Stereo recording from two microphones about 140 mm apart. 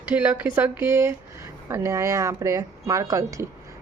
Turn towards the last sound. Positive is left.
turn(degrees=-20)  # may be behind; listen again after turning